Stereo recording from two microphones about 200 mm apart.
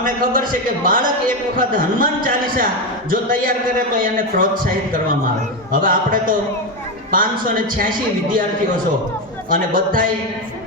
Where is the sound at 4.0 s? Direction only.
45° right (ahead or behind).